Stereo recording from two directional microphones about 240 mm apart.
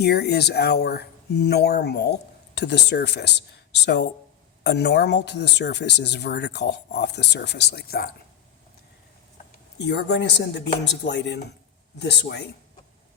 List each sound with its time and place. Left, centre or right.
0.0 s speech: left
9.7 s speech: left